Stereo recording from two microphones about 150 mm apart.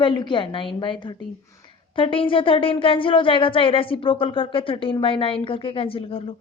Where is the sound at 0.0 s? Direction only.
30° left (ahead or behind).